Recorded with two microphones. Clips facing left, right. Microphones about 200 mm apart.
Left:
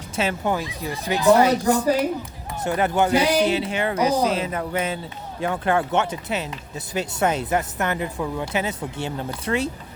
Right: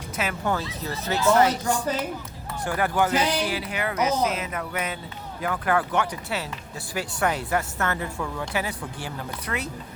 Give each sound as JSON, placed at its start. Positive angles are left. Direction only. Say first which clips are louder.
{"t": 0.2, "sound": "speech", "louder": "left 4 dB", "side_deg": 25}
{"t": 0.5, "sound": "speech", "louder": "left 2 dB", "side_deg": 15}
{"t": 2.6, "sound": "speech", "louder": "left 3 dB", "side_deg": 25}